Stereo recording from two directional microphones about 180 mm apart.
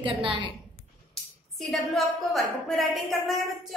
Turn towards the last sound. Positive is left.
turn(degrees=0)  # may be behind; listen again after turning